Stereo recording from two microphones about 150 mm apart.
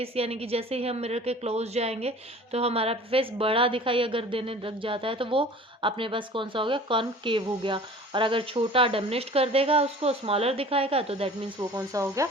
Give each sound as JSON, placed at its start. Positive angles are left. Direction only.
{"t": 0.0, "sound": "a woman's voice", "side_deg": -40}
{"t": 11.8, "sound": "speech", "side_deg": -20}